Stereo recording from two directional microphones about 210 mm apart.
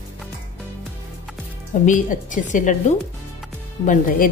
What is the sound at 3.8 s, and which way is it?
Speech, 40° left (ahead or behind).